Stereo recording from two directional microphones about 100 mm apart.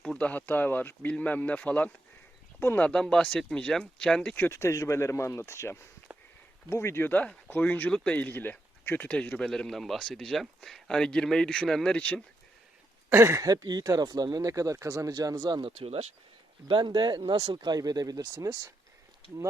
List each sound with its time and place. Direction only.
0.0 s speech: 10° left (ahead or behind)
4.4 s speech: 25° left (ahead or behind); by 12.2 s 10° left (ahead or behind)
13.1 s speech: 30° right (ahead or behind)
15.6 s speech: 80° right
16.6 s speech: 50° right (ahead or behind); by 18.7 s 35° right (ahead or behind)